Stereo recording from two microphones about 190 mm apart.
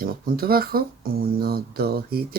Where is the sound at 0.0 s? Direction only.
50° right (ahead or behind).